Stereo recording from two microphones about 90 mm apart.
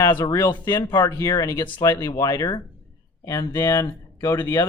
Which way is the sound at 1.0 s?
35° left (ahead or behind).